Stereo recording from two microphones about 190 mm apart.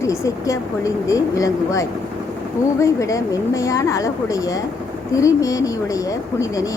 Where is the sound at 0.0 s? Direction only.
15° left (ahead or behind).